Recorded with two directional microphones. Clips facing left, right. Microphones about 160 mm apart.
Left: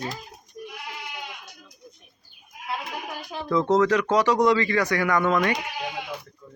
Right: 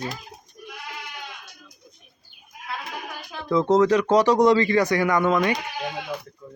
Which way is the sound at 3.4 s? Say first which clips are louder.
Right 2 dB; 15° right (ahead or behind).